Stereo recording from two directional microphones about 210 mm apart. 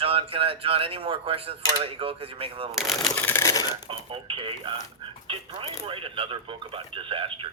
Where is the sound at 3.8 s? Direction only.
25° right (ahead or behind).